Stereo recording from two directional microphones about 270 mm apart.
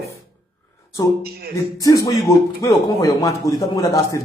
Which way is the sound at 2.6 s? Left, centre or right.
Centre.